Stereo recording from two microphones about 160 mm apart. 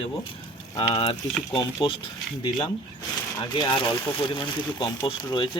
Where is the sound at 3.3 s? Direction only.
30° left (ahead or behind).